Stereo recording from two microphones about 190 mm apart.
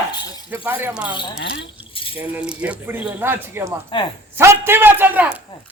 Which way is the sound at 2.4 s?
5° right (ahead or behind).